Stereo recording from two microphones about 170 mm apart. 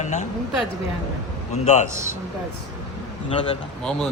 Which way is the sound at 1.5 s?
40° left (ahead or behind).